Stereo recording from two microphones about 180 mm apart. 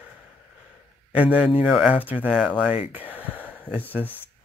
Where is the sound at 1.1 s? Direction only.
10° right (ahead or behind).